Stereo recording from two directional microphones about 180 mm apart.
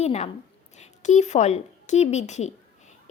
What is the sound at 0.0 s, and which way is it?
A woman's voice, 35° left (ahead or behind).